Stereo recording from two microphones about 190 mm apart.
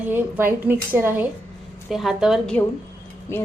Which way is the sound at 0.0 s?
10° right (ahead or behind).